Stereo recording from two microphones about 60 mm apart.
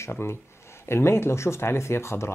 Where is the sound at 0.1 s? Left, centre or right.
Left.